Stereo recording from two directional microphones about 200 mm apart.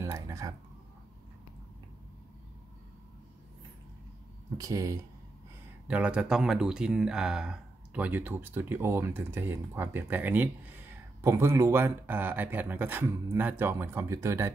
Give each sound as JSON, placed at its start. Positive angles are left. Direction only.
{"t": 0.0, "sound": "a sound", "side_deg": -15}
{"t": 4.6, "sound": "speech", "side_deg": -15}
{"t": 5.9, "sound": "speech", "side_deg": -5}